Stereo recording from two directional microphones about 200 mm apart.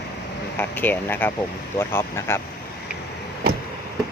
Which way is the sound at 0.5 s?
10° left (ahead or behind).